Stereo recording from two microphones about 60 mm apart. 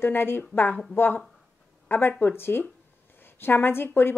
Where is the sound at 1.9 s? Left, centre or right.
Left.